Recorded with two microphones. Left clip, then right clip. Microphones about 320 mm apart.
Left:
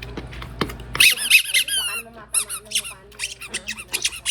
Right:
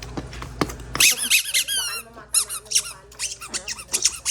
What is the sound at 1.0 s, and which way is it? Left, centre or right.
Squeak, right.